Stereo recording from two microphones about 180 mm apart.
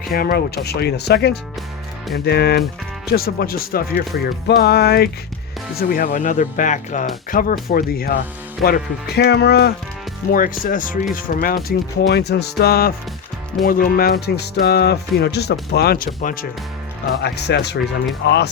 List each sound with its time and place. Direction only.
0.1 s speech: 55° left (ahead or behind)
5.7 s speech: 55° left (ahead or behind)
10.3 s speech: 50° left (ahead or behind)
17.2 s speech: 65° left (ahead or behind)